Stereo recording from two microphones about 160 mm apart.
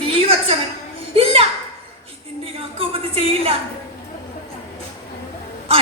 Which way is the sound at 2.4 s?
35° right (ahead or behind).